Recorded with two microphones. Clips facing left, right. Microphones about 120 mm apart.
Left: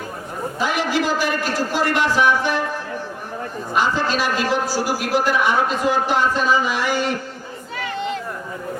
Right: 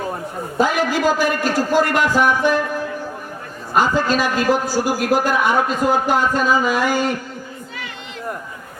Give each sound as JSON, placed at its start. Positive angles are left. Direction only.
{"t": 0.6, "sound": "a man's voice", "side_deg": -45}
{"t": 3.8, "sound": "a man's voice", "side_deg": -45}